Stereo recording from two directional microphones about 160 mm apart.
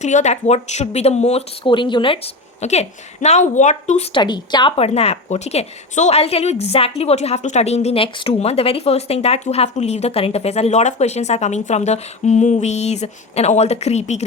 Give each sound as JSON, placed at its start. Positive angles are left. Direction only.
{"t": 0.0, "sound": "speech", "side_deg": 45}
{"t": 4.2, "sound": "a woman's voice", "side_deg": 30}